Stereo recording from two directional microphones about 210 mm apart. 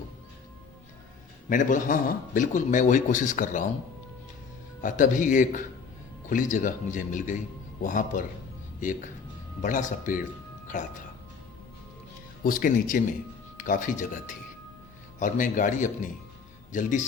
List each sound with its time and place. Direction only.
1.5 s a man's voice: 40° left (ahead or behind)
4.8 s a man's voice: 40° left (ahead or behind)
9.6 s a man's voice: 35° left (ahead or behind)
12.5 s a man's voice: 40° left (ahead or behind)